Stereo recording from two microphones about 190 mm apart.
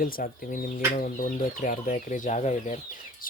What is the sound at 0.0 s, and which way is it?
Speech, 45° left (ahead or behind).